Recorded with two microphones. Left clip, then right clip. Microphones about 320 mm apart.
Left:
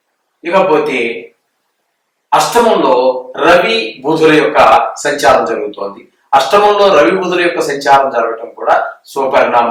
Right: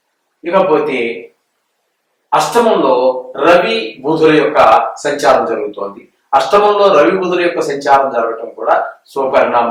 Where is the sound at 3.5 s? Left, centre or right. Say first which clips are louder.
Left 1 dB; centre.